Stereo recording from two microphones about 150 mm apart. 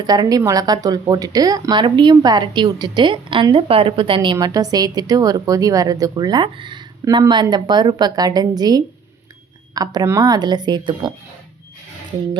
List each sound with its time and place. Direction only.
0.0 s speech: 25° right (ahead or behind)